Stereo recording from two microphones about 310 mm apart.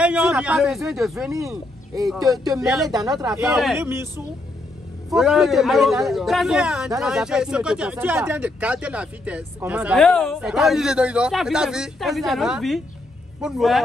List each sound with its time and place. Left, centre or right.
0.0 s a man's voice: centre
5.1 s a man's voice: centre